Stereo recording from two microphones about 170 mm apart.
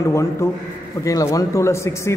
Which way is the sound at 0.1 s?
15° left (ahead or behind).